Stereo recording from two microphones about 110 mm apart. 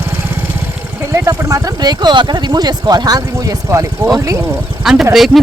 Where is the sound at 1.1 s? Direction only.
25° right (ahead or behind).